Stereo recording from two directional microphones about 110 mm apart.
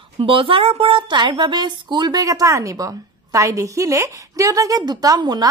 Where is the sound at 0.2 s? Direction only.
55° right (ahead or behind).